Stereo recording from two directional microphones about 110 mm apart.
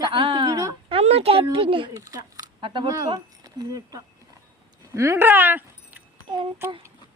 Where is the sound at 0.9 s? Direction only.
70° right (ahead or behind); by 2.8 s 50° right (ahead or behind).